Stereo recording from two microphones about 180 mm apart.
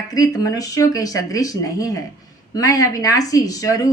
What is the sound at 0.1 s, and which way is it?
Speech, 20° left (ahead or behind).